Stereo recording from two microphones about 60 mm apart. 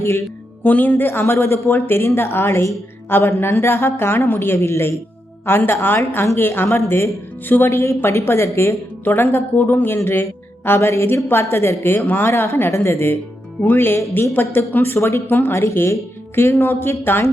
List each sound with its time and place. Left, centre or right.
0.0 s speech: left
0.6 s speech: left
4.5 s speech: left
5.5 s speech: left
6.7 s speech: left
9.0 s speech: left
10.8 s speech: left
12.3 s speech: left
14.9 s speech: left
15.3 s speech: left
15.5 s speech: left